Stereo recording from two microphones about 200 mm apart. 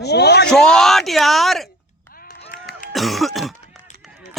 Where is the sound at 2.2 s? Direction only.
45° left (ahead or behind).